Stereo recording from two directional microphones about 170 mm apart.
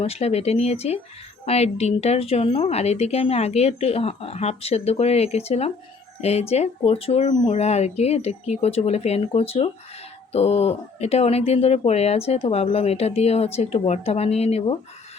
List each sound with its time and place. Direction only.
0.0 s speech: 35° left (ahead or behind)